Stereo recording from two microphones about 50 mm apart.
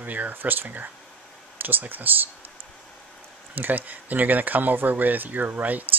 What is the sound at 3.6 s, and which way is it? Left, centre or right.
Speech, right.